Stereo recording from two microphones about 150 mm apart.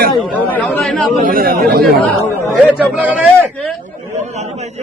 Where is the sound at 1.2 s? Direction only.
80° right.